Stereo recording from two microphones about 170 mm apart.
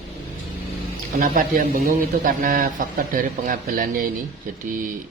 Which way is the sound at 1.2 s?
55° right (ahead or behind).